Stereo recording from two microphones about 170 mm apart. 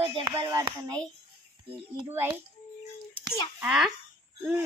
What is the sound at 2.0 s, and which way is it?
Speech, 10° right (ahead or behind).